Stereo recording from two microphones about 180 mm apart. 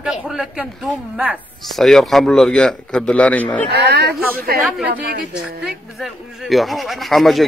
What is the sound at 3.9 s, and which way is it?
Speech, 65° right (ahead or behind).